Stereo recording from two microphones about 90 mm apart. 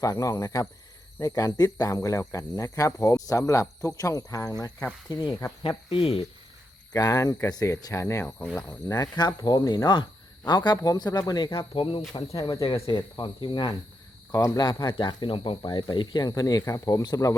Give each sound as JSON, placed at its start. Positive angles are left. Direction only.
{"t": 0.0, "sound": "speech", "side_deg": 40}
{"t": 5.6, "sound": "speech", "side_deg": 90}
{"t": 6.9, "sound": "speech", "side_deg": 45}
{"t": 8.0, "sound": "speech", "side_deg": 25}
{"t": 8.9, "sound": "speech", "side_deg": 45}
{"t": 10.8, "sound": "speech", "side_deg": 45}
{"t": 13.0, "sound": "speech", "side_deg": 60}
{"t": 14.3, "sound": "speech", "side_deg": 35}
{"t": 14.6, "sound": "speech", "side_deg": 55}
{"t": 16.3, "sound": "speech", "side_deg": 45}